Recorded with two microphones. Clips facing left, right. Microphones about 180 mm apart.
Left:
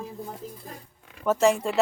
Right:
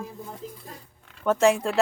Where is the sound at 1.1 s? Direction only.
5° left (ahead or behind).